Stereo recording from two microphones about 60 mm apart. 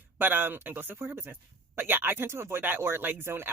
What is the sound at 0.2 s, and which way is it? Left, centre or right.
Speech, right.